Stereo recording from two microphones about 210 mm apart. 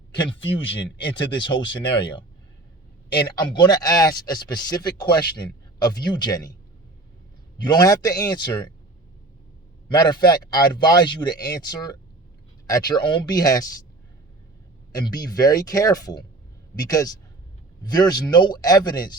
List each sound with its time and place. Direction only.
0.3 s speech: 25° left (ahead or behind)
7.6 s speech: 20° left (ahead or behind)
9.9 s speech: 20° left (ahead or behind)
14.9 s speech: 20° left (ahead or behind)